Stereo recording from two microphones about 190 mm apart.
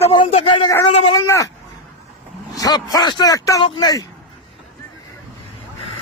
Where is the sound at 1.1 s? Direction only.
20° left (ahead or behind).